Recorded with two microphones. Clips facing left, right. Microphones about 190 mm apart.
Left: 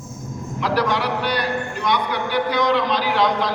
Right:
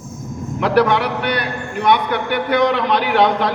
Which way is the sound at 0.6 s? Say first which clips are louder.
Right 6 dB; 60° right (ahead or behind).